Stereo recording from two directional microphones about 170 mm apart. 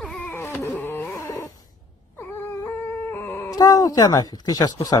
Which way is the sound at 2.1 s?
15° left (ahead or behind).